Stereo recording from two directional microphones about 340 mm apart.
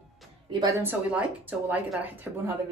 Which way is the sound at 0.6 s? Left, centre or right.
Centre.